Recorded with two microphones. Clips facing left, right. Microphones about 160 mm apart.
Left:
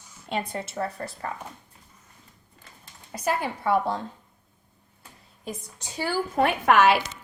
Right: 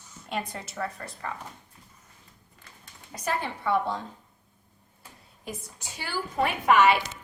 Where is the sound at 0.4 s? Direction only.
25° left (ahead or behind).